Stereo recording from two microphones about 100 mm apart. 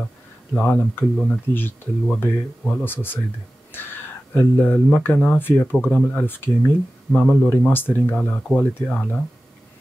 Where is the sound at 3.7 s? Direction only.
20° left (ahead or behind).